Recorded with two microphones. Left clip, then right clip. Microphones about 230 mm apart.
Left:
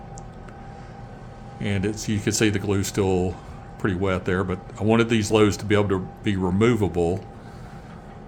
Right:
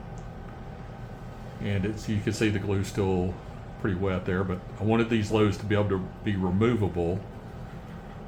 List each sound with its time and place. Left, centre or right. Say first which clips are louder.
1.6 s speech: left 5 dB; left